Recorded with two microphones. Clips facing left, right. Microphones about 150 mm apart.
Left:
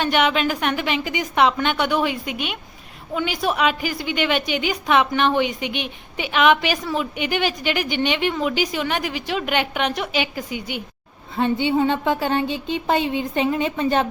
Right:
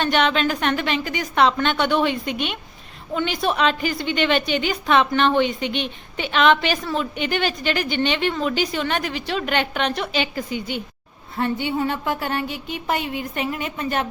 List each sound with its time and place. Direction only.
0.0 s a woman's voice: 10° left (ahead or behind); by 14.1 s 25° left (ahead or behind)